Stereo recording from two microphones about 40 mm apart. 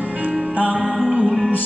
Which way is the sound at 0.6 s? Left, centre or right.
Right.